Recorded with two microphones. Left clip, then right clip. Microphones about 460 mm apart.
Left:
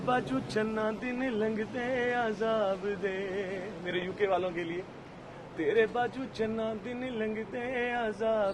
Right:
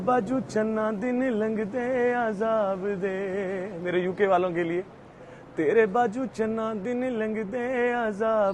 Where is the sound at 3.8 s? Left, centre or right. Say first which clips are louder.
Right 7 dB; right.